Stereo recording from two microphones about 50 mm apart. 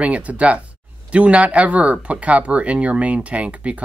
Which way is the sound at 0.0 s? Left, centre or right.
Right.